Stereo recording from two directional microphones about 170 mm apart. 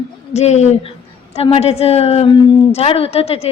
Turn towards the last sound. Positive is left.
turn(degrees=35)  # may be behind; listen again after turning